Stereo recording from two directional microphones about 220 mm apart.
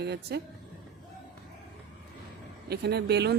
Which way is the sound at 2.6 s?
50° right (ahead or behind).